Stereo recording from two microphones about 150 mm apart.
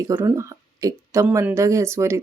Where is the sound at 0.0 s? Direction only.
15° right (ahead or behind).